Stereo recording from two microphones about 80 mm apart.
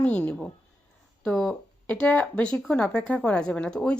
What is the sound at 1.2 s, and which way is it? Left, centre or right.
Speech, centre.